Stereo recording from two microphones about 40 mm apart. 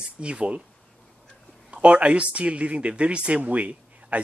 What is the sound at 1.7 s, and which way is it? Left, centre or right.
Speech, right.